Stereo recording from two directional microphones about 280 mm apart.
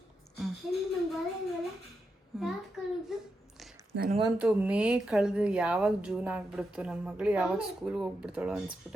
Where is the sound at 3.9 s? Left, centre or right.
Right.